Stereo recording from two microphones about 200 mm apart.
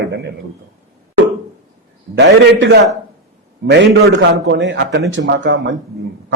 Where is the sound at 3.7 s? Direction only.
60° right (ahead or behind).